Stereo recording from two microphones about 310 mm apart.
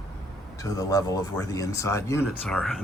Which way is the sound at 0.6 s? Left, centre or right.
Centre.